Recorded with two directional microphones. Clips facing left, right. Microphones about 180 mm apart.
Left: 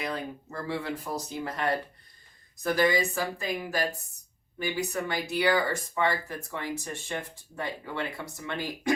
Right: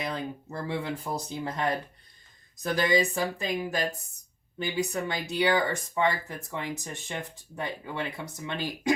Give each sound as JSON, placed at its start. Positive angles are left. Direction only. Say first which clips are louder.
{"t": 0.0, "sound": "speech", "louder": "right 1 dB", "side_deg": -20}